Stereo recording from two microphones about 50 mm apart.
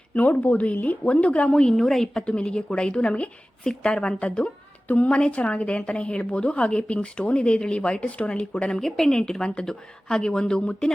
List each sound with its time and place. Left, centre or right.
0.1 s a woman's voice: left
1.6 s a woman's voice: centre
2.2 s a woman's voice: centre
10.6 s a woman's voice: left